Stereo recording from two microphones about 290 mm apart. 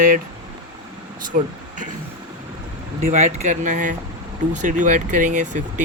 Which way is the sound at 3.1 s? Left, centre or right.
Right.